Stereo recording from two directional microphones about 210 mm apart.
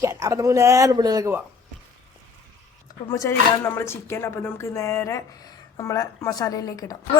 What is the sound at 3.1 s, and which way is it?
Speech, 15° left (ahead or behind).